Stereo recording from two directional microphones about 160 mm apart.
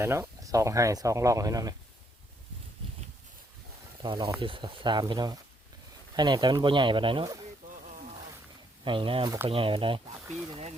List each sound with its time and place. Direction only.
0.0 s speech: 15° right (ahead or behind)
4.0 s speech: 30° right (ahead or behind)
8.8 s speech: 30° right (ahead or behind)